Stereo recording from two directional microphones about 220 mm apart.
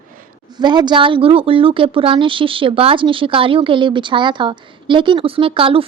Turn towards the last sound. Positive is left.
turn(degrees=-25)  # may be behind; listen again after turning